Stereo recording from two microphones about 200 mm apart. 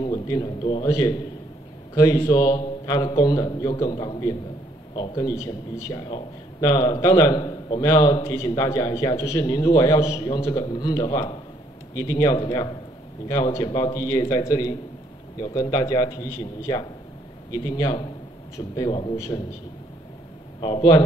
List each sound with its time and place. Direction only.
0.0 s a man's voice: 20° left (ahead or behind)
20.6 s speech: 20° left (ahead or behind)